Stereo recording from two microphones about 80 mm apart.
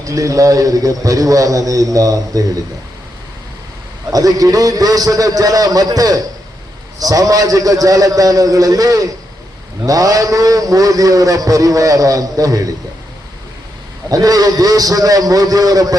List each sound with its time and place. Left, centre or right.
0.0 s a man's voice: right
4.1 s a man's voice: right
14.1 s a man's voice: right